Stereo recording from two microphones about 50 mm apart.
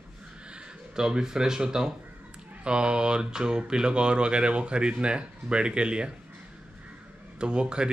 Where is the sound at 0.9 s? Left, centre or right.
Centre.